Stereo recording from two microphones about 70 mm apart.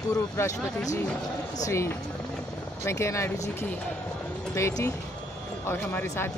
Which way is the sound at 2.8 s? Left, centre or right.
Left.